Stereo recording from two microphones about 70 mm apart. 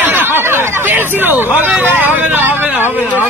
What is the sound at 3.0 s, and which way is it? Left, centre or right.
Speech, left.